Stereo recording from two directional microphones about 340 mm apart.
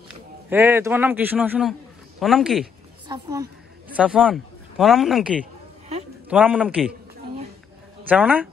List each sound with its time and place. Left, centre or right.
0.5 s a man's voice: centre
5.4 s a sound: centre
6.2 s a man's voice: centre
8.1 s a man's voice: centre